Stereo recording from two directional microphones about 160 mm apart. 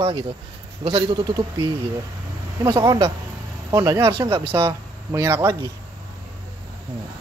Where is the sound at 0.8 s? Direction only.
35° right (ahead or behind); by 4.4 s 20° right (ahead or behind).